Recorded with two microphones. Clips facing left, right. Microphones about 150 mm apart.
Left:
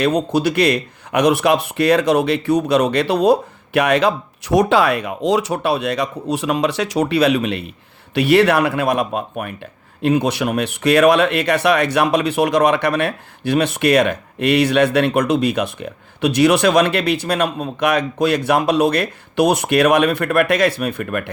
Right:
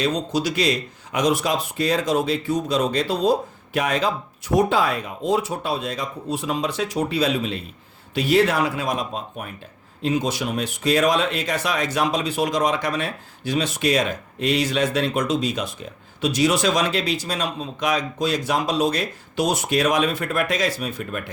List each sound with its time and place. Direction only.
0.0 s a man's voice: 60° left (ahead or behind)